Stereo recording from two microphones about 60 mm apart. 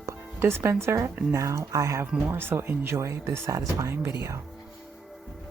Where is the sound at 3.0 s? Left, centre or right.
Right.